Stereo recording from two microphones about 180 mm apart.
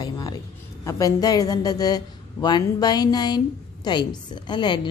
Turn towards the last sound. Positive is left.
turn(degrees=25)  # may be behind; listen again after turning